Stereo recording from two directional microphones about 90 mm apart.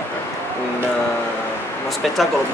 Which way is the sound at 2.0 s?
Centre (ahead or behind).